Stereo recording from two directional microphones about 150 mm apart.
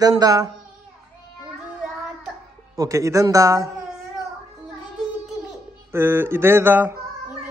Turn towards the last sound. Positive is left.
turn(degrees=-15)  # may be behind; listen again after turning